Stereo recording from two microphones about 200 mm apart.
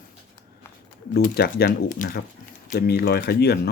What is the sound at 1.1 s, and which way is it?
Speech, 50° left (ahead or behind).